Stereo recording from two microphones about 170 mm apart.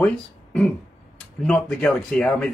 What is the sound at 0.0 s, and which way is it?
Speech, 5° left (ahead or behind).